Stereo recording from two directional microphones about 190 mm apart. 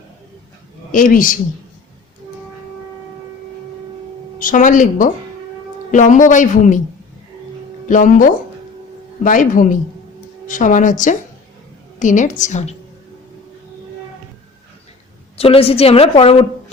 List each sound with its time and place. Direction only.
0.9 s a woman's voice: 45° left (ahead or behind)
4.4 s a woman's voice: 45° left (ahead or behind)
7.9 s a woman's voice: 45° left (ahead or behind)
15.4 s a woman's voice: 30° left (ahead or behind)